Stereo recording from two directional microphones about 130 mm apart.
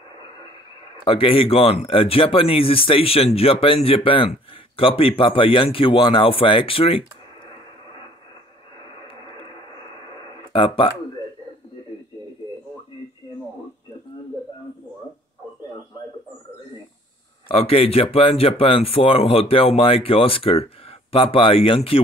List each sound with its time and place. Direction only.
1.0 s speech: 45° left (ahead or behind)
10.5 s speech: 45° left (ahead or behind)
17.5 s speech: 50° left (ahead or behind)